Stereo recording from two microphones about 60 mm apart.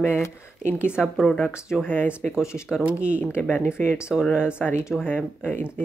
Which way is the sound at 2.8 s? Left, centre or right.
Right.